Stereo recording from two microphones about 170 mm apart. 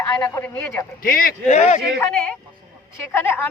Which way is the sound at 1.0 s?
55° left (ahead or behind).